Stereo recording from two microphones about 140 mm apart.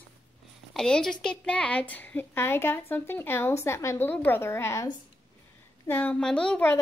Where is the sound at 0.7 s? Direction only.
5° left (ahead or behind).